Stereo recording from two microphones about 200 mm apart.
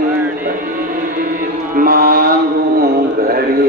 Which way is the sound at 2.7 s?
50° right (ahead or behind).